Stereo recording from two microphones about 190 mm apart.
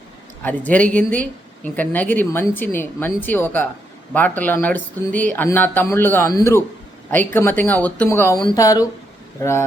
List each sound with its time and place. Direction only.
0.4 s a woman's voice: 10° left (ahead or behind)